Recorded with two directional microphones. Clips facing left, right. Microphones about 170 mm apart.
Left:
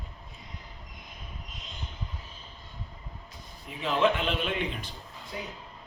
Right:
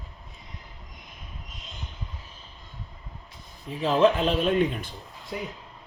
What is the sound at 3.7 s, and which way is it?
Speech, 35° right (ahead or behind).